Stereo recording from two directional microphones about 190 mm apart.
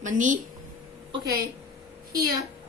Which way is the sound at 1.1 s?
20° right (ahead or behind).